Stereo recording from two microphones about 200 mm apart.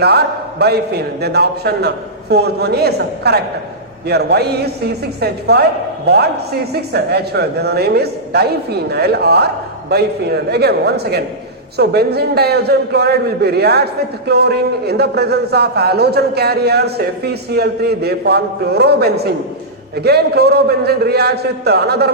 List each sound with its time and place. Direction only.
0.0 s a man's voice: 55° right (ahead or behind)